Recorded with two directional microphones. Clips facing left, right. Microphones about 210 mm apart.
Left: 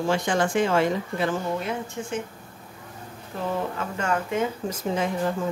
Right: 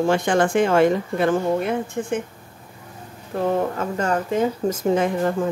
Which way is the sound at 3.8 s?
35° right (ahead or behind).